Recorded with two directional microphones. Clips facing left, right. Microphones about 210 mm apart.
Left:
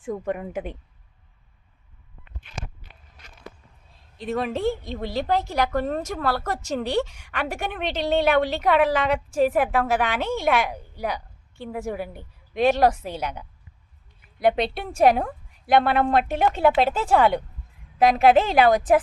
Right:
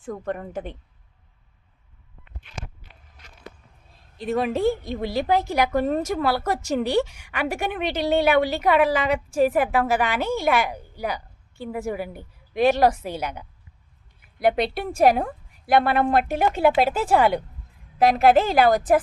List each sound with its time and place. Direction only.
0.0 s a woman's voice: 10° left (ahead or behind)
4.2 s speech: 5° right (ahead or behind)
14.4 s a woman's voice: 5° right (ahead or behind)